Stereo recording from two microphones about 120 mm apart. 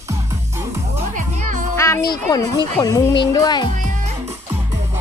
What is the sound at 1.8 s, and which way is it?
Music, 25° left (ahead or behind).